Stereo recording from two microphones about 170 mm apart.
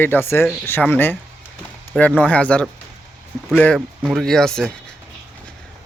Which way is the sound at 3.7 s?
Centre (ahead or behind).